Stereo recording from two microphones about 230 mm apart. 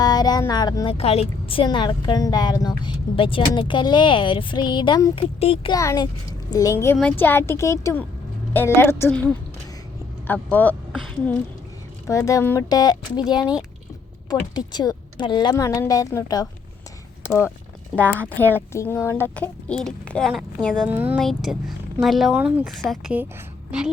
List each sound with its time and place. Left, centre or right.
0.0 s speech: centre
12.0 s speech: centre
20.9 s speech: centre